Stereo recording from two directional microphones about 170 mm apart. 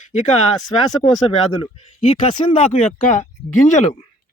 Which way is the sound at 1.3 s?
35° left (ahead or behind).